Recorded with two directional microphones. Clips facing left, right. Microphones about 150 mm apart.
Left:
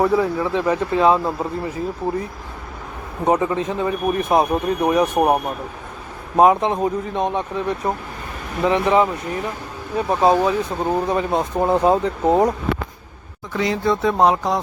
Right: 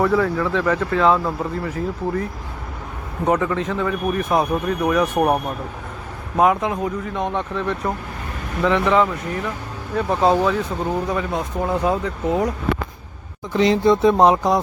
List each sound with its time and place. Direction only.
0.0 s speech: 15° left (ahead or behind)
3.2 s speech: 20° left (ahead or behind)
11.1 s speech: 30° left (ahead or behind)
13.5 s speech: 25° right (ahead or behind)